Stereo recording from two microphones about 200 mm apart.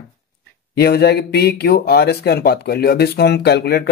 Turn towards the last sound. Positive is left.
turn(degrees=55)  # may be behind; listen again after turning